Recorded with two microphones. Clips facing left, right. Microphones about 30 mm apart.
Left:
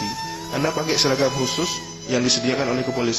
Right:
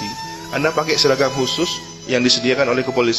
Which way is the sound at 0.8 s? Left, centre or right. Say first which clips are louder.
Right 4 dB; right.